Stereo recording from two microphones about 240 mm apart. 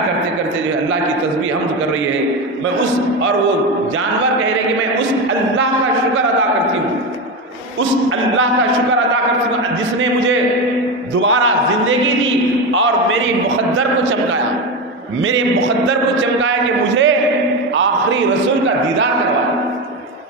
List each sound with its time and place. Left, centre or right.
11.1 s speech: right
15.9 s a man's voice: right